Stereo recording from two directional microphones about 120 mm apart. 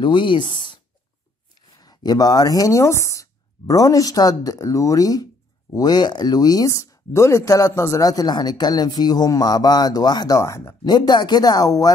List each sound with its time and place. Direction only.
0.0 s speech: 40° left (ahead or behind)
1.8 s speech: 35° left (ahead or behind)
10.9 s speech: 35° left (ahead or behind)